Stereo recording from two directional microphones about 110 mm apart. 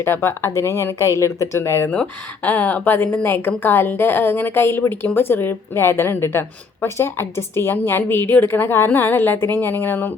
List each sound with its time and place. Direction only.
0.0 s speech: 20° left (ahead or behind)
1.9 s speech: 15° left (ahead or behind)